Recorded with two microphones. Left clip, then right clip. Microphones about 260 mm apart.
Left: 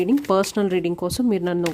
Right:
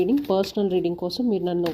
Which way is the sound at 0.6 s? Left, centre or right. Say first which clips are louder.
Left 1 dB; left.